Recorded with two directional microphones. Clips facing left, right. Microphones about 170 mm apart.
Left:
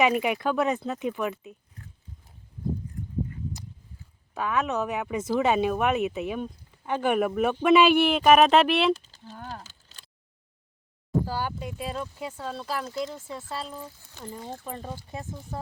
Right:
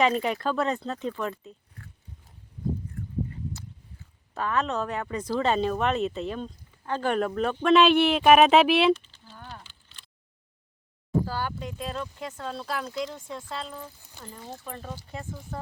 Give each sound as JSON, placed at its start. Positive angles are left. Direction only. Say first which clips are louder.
{"t": 0.0, "sound": "speech", "louder": "left 1 dB", "side_deg": 10}
{"t": 4.4, "sound": "speech", "louder": "left 1 dB", "side_deg": 10}
{"t": 8.9, "sound": "a sound", "louder": "right 2 dB", "side_deg": 40}
{"t": 11.3, "sound": "speech", "louder": "left 1 dB", "side_deg": 10}
{"t": 14.6, "sound": "speech", "louder": "left 2 dB", "side_deg": 15}